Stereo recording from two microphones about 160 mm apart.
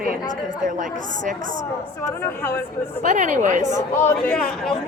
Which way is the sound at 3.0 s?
50° right (ahead or behind).